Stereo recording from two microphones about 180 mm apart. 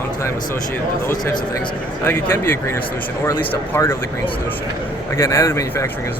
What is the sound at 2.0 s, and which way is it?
Speech, 10° left (ahead or behind).